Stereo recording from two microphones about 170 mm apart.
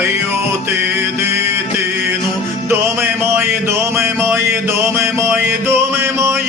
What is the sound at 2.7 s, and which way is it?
Music, 15° right (ahead or behind).